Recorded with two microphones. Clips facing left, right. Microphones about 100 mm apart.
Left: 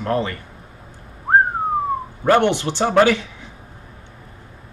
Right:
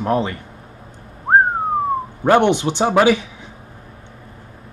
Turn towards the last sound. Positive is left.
turn(degrees=-15)  # may be behind; listen again after turning